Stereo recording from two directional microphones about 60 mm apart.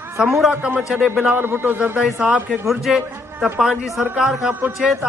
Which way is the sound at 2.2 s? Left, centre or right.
Right.